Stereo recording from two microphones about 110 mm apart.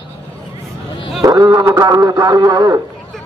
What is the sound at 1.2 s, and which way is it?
Speech, 40° right (ahead or behind).